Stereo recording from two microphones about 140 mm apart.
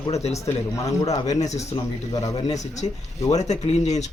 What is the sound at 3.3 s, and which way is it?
Speech, 55° left (ahead or behind).